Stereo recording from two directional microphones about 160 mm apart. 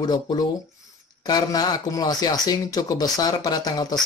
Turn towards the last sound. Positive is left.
turn(degrees=25)  # may be behind; listen again after turning